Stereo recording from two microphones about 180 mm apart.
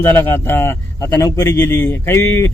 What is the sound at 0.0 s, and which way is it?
Speech, 10° left (ahead or behind).